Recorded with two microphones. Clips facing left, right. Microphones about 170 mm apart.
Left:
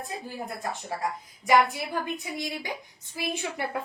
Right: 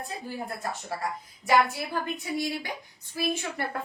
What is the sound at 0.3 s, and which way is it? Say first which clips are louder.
Speech: right 1 dB; 20° left (ahead or behind).